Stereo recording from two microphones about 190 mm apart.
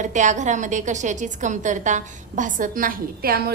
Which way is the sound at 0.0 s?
40° right (ahead or behind).